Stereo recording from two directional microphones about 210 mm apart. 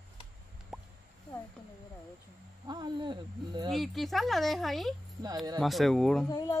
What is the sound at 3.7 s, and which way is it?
Speech, centre (ahead or behind).